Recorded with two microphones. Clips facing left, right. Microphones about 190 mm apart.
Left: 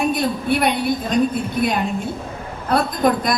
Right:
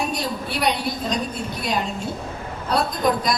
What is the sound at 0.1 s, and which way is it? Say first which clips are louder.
Speech: left 7 dB; 55° left (ahead or behind).